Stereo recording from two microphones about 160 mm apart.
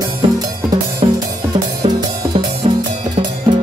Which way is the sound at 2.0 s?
30° right (ahead or behind).